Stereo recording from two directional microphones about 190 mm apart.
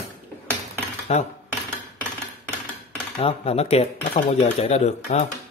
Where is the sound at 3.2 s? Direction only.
30° left (ahead or behind).